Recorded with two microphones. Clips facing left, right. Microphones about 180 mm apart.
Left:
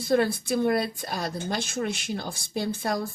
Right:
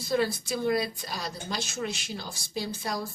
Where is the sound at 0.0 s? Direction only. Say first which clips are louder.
Left 4 dB; 55° left (ahead or behind).